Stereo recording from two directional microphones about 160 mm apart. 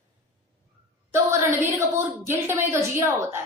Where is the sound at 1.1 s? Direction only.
15° right (ahead or behind).